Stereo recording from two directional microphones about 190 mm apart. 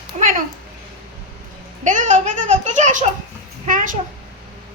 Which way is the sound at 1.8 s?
40° right (ahead or behind).